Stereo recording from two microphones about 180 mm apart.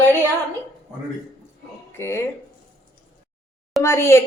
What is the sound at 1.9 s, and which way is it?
Speech, 15° left (ahead or behind).